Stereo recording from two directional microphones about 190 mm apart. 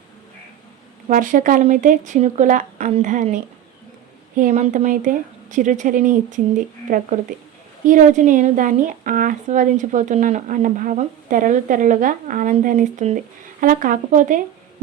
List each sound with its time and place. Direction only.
1.0 s speech: 40° right (ahead or behind)
4.4 s speech: 40° right (ahead or behind)